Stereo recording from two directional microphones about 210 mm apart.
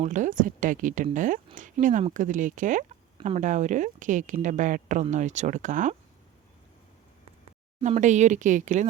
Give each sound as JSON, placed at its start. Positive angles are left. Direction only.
{"t": 0.0, "sound": "speech", "side_deg": -35}
{"t": 7.8, "sound": "speech", "side_deg": -35}